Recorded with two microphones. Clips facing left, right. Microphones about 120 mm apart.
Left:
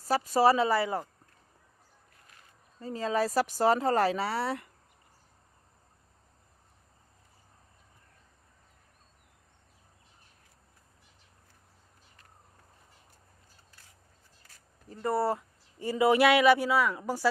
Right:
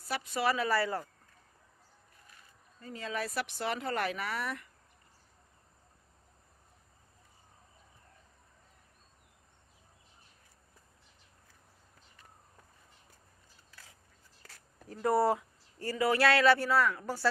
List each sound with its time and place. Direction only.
0.0 s speech: 40° left (ahead or behind); by 1.0 s 20° left (ahead or behind)
2.8 s speech: 35° left (ahead or behind)
14.8 s speech: centre (ahead or behind)
15.8 s speech: 20° left (ahead or behind)